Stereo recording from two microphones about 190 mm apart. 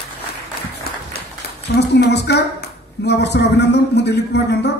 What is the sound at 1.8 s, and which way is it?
A man's voice, 60° left (ahead or behind).